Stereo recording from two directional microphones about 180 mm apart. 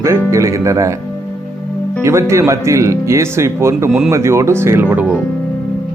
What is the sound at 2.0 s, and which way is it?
Speech, 15° right (ahead or behind).